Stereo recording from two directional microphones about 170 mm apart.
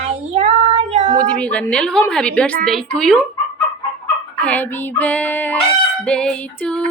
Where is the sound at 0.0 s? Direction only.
40° right (ahead or behind).